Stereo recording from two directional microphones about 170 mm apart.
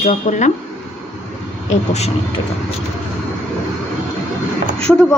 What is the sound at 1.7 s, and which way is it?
Speech, 40° left (ahead or behind).